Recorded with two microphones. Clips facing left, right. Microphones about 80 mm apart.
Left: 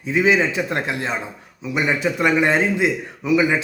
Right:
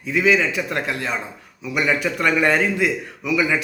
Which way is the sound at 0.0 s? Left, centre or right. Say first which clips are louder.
Left 1 dB; left.